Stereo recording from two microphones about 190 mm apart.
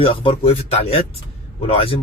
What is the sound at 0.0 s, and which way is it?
Speech, 30° left (ahead or behind).